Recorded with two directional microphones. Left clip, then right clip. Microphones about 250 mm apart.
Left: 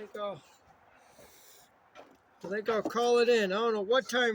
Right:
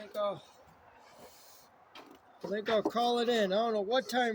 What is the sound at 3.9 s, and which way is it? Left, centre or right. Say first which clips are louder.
Speech: left 3 dB; right.